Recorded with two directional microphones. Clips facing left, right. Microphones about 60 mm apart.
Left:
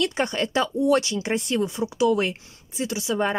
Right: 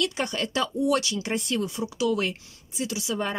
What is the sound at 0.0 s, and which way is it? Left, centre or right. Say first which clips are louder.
Speech: left 3 dB; left.